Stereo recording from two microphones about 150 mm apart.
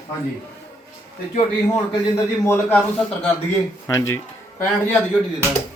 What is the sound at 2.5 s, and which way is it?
Speech, 10° left (ahead or behind).